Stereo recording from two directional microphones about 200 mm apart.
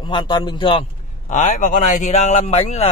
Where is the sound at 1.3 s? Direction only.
35° left (ahead or behind).